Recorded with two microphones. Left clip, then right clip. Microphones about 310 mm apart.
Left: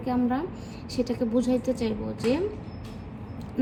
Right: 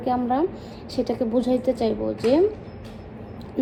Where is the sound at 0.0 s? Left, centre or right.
Centre.